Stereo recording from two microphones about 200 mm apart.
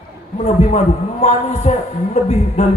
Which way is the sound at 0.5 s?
35° left (ahead or behind).